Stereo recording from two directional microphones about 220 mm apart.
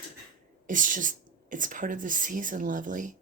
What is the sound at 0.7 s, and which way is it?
Speech, 35° right (ahead or behind).